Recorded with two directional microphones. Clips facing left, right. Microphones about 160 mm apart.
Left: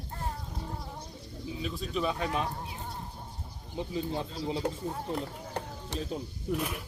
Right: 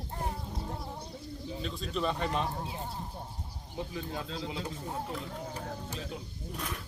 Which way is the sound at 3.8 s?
25° left (ahead or behind).